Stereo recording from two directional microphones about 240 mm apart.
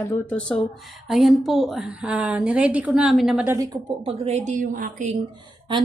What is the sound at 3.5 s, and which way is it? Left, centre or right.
Speech, centre.